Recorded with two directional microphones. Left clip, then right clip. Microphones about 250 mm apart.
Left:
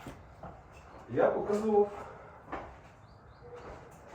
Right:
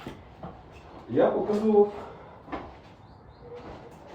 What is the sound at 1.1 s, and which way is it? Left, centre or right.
Speech, right.